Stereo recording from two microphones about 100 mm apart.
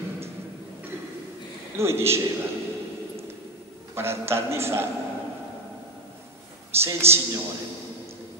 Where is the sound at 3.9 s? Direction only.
25° right (ahead or behind).